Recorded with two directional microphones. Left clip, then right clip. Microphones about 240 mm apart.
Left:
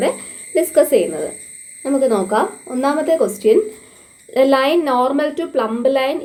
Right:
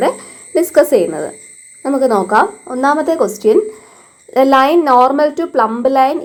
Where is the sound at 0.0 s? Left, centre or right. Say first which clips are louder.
Right 4 dB; right.